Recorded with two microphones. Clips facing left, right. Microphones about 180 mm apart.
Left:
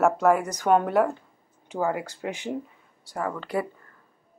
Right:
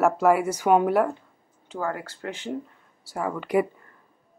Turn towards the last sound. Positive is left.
turn(degrees=-5)  # may be behind; listen again after turning